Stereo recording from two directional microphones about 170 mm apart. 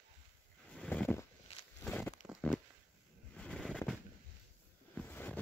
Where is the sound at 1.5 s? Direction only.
40° left (ahead or behind).